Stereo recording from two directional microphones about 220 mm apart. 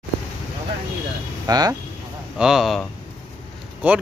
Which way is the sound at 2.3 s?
Centre (ahead or behind).